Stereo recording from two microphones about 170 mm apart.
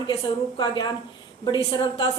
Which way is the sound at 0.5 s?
25° left (ahead or behind).